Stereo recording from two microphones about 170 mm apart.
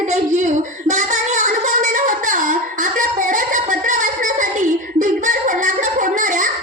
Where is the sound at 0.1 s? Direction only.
45° right (ahead or behind).